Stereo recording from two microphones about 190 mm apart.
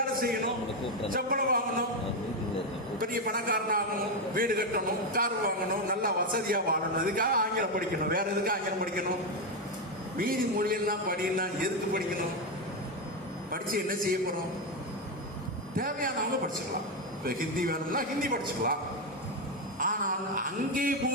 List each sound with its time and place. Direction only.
0.0 s a sound: 50° right (ahead or behind)
1.1 s a man's voice: 50° right (ahead or behind)
3.0 s a man's voice: 50° right (ahead or behind)
10.2 s a man's voice: 50° right (ahead or behind)
13.5 s a man's voice: 50° right (ahead or behind)
15.7 s a man's voice: 50° right (ahead or behind)
17.2 s a man's voice: 50° right (ahead or behind)
19.8 s a sound: 45° right (ahead or behind)